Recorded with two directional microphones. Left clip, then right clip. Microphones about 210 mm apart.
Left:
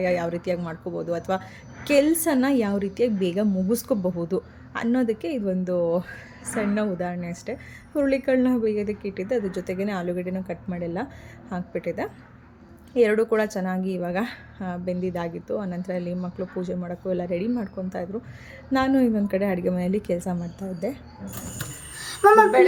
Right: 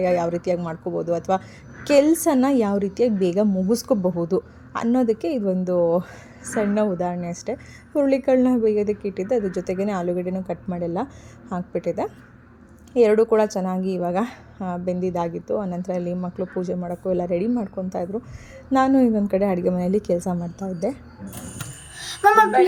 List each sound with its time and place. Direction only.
0.0 s a woman's voice: 5° right (ahead or behind)
22.2 s speech: 50° right (ahead or behind)